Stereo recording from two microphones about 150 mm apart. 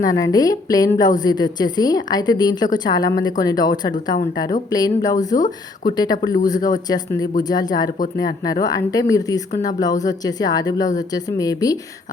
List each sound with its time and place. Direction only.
0.0 s speech: 25° left (ahead or behind)